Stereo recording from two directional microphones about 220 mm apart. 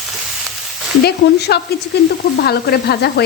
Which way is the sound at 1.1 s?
45° left (ahead or behind).